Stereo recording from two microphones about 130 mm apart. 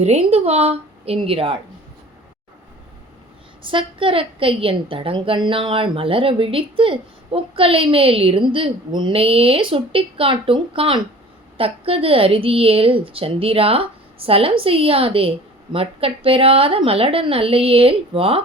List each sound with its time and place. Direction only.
0.0 s a woman's voice: 55° right (ahead or behind)
3.7 s a woman's voice: 40° right (ahead or behind)